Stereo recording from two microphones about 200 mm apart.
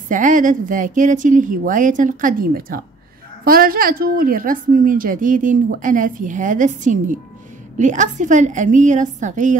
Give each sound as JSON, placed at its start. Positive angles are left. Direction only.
{"t": 0.1, "sound": "a woman's voice", "side_deg": -40}